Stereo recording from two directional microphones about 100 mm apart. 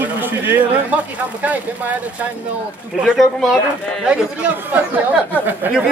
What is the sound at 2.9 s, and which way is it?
Speech, 5° right (ahead or behind).